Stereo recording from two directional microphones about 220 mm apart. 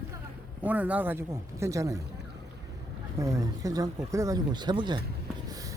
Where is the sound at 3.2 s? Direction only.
15° right (ahead or behind).